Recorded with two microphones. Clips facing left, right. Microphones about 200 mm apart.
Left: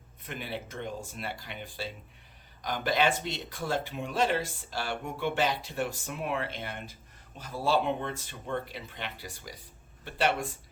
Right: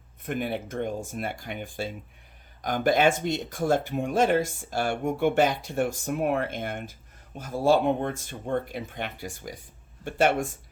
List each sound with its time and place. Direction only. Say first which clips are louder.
0.3 s speech: right 8 dB; 50° right (ahead or behind)